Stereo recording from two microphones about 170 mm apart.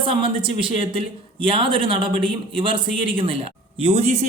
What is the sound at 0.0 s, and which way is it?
Speech, 30° right (ahead or behind).